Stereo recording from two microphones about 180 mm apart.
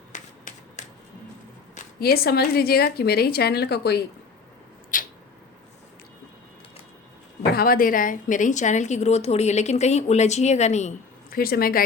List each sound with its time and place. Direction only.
0.1 s finger snapping: 45° left (ahead or behind)
2.0 s a woman's voice: 60° left (ahead or behind)
4.9 s a sound: 50° left (ahead or behind)
7.5 s a woman's voice: 55° left (ahead or behind); by 10.9 s 40° left (ahead or behind)
11.3 s a woman's voice: 55° left (ahead or behind)